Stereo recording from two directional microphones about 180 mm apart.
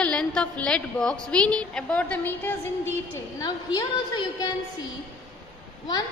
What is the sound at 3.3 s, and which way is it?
A woman's voice, 20° left (ahead or behind).